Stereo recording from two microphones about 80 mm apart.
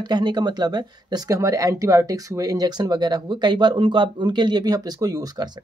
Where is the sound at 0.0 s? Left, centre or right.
Right.